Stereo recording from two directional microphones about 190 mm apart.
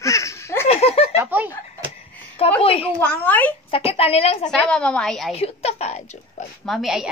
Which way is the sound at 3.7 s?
30° left (ahead or behind).